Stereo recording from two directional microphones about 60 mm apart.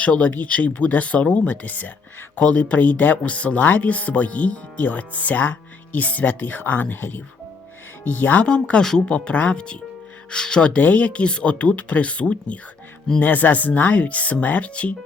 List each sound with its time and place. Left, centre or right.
0.0 s speech: left
8.4 s speech: centre